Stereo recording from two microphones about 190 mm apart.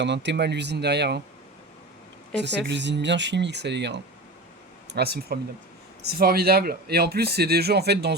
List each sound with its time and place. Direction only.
0.0 s speech: 65° right (ahead or behind)
2.3 s speech: 65° right (ahead or behind)